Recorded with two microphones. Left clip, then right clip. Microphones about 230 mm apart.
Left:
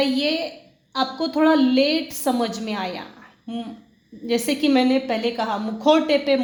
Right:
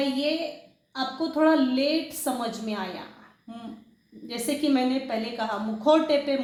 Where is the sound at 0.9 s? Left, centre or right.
Left.